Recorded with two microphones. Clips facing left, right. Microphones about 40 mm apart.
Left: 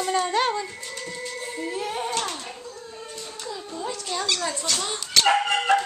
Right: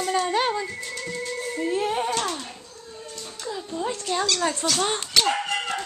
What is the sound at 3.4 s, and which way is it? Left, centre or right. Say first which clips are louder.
Music: right 4 dB; centre.